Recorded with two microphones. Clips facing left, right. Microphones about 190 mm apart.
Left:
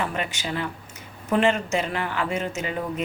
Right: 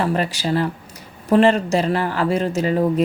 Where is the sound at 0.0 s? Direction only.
35° right (ahead or behind).